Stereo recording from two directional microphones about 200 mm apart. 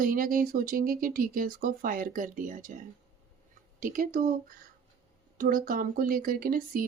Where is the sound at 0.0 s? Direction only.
45° right (ahead or behind).